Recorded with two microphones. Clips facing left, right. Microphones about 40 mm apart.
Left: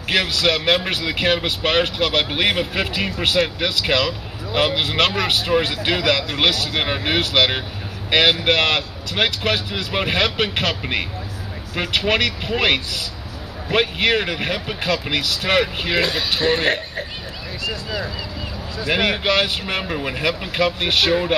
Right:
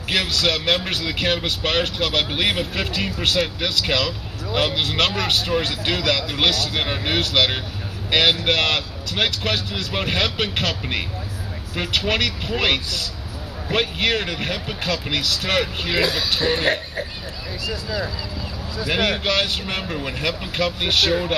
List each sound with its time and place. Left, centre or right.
0.1 s speech: centre